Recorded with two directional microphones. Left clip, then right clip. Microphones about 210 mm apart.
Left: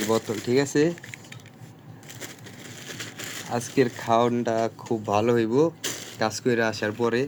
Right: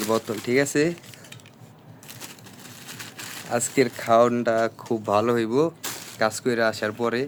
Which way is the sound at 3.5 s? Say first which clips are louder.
Right 2 dB; 15° right (ahead or behind).